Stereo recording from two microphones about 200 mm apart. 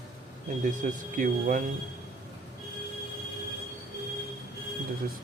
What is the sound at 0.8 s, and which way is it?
Speech, 40° right (ahead or behind).